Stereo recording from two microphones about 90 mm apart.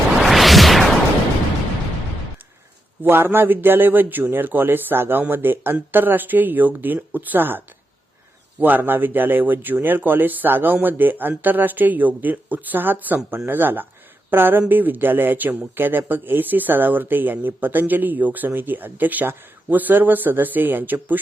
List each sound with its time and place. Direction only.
0.2 s a sound: centre (ahead or behind)
3.0 s speech: 20° right (ahead or behind)
8.6 s speech: 20° right (ahead or behind)